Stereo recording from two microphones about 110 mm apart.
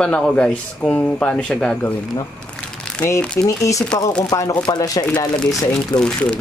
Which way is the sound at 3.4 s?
30° left (ahead or behind).